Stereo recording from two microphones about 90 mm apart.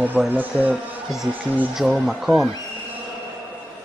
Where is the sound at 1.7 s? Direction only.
5° right (ahead or behind).